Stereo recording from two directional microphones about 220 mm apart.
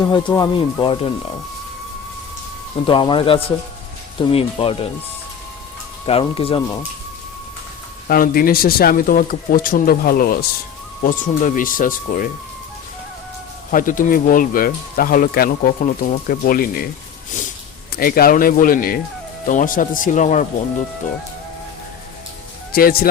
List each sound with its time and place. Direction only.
0.0 s speech: 20° left (ahead or behind)
2.8 s speech: 25° left (ahead or behind)
6.1 s speech: 25° left (ahead or behind)
8.0 s speech: 40° left (ahead or behind)
13.7 s speech: 35° left (ahead or behind)
17.9 s speech: 40° left (ahead or behind)
22.7 s speech: 40° left (ahead or behind)